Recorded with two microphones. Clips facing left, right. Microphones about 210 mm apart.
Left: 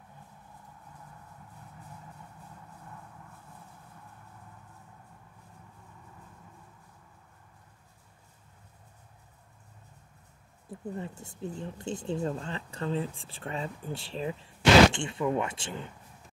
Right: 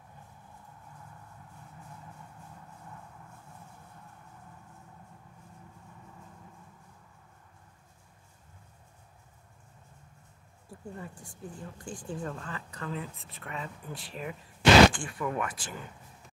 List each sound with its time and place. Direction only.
10.7 s speech: 25° left (ahead or behind)